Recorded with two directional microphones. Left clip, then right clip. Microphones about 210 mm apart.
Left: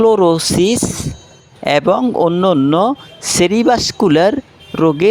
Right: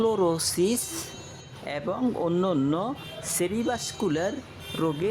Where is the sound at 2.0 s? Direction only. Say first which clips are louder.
Left 13 dB; 35° left (ahead or behind).